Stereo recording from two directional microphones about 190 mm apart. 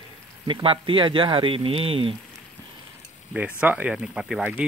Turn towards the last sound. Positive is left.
turn(degrees=-5)  # may be behind; listen again after turning